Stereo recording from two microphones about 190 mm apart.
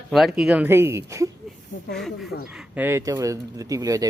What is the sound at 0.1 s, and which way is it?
Speech, centre (ahead or behind).